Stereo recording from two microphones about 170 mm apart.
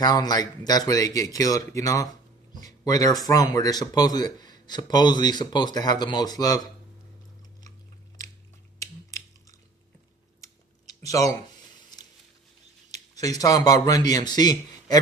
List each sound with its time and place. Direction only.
0.0 s speech: 25° left (ahead or behind)
8.8 s typing: 20° left (ahead or behind)
11.0 s speech: 20° left (ahead or behind)
12.9 s a sound: 20° left (ahead or behind)
13.4 s speech: 20° left (ahead or behind)